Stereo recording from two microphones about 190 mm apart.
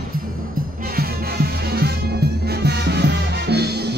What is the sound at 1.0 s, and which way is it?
Music, 55° right (ahead or behind).